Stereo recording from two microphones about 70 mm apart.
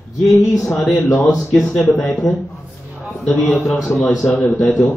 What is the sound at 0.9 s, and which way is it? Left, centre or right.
Speech, left.